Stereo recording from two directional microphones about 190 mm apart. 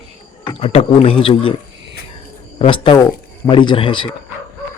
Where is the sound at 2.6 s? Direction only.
30° left (ahead or behind).